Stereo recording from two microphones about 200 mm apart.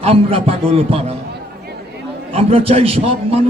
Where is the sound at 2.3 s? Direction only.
30° right (ahead or behind).